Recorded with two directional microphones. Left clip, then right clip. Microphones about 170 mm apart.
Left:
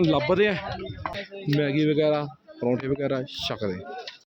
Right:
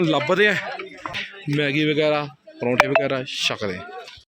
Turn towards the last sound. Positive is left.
turn(degrees=10)  # may be behind; listen again after turning